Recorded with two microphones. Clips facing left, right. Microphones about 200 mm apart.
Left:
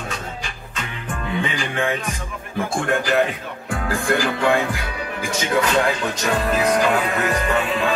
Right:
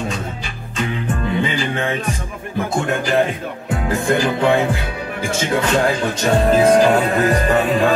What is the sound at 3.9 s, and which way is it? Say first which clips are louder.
Music: right 3 dB; 25° right (ahead or behind).